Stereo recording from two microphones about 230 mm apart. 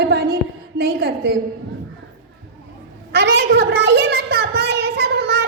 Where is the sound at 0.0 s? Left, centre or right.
Right.